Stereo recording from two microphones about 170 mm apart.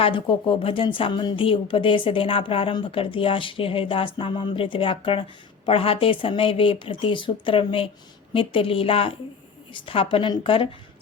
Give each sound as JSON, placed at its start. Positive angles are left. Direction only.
{"t": 0.0, "sound": "a woman's voice", "side_deg": 30}